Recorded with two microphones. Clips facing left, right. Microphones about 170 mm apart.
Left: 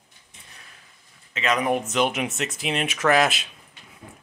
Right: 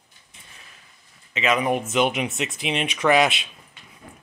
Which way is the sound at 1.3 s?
5° right (ahead or behind).